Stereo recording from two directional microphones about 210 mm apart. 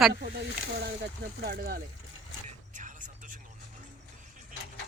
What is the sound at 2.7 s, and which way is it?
Music, 35° right (ahead or behind).